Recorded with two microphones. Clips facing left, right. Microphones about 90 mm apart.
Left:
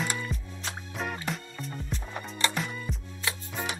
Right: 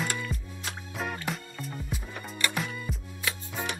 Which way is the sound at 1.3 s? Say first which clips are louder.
Even; centre (ahead or behind).